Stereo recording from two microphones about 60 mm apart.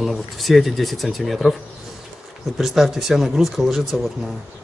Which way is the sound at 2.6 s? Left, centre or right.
Centre.